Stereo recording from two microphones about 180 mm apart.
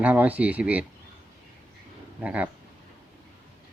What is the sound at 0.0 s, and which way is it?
Speech, 10° right (ahead or behind).